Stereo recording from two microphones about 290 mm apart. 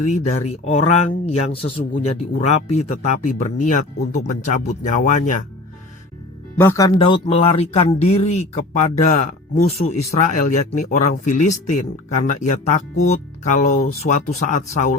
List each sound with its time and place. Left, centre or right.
0.0 s speech: left
6.6 s speech: centre; by 14.9 s left